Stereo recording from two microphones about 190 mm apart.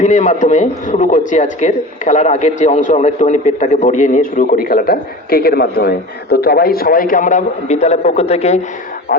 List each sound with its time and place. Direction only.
0.0 s a man's voice: 40° left (ahead or behind)